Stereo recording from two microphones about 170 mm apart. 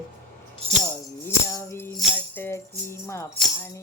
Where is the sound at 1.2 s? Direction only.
15° left (ahead or behind).